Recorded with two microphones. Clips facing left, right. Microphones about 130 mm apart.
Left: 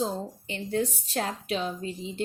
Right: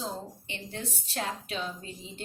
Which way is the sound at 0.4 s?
40° left (ahead or behind).